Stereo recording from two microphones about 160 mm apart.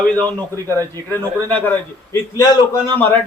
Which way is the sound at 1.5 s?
10° left (ahead or behind).